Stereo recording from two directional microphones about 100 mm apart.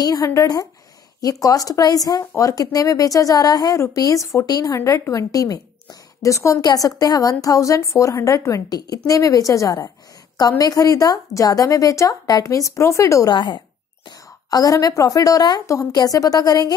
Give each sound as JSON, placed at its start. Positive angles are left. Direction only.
{"t": 0.0, "sound": "a woman's voice", "side_deg": 35}
{"t": 13.3, "sound": "speech", "side_deg": 50}
{"t": 14.5, "sound": "a woman's voice", "side_deg": 40}